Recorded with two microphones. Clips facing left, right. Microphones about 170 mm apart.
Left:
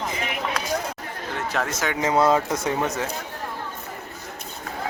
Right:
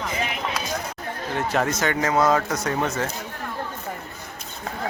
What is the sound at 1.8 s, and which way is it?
Speech, 10° left (ahead or behind).